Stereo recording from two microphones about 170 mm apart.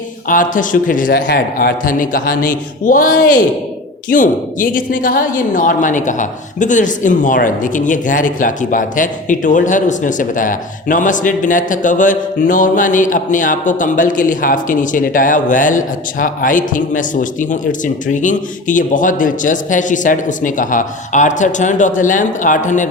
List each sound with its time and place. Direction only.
0.3 s a woman's voice: 50° left (ahead or behind)